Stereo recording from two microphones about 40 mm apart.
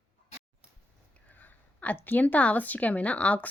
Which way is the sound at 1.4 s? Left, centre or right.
Left.